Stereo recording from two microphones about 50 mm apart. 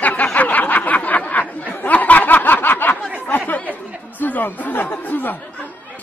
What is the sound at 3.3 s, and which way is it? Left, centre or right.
Chatter, left.